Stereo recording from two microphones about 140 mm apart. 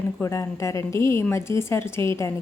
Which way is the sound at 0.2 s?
20° left (ahead or behind).